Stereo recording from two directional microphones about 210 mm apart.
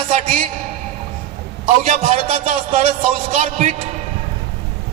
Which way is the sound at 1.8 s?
35° right (ahead or behind).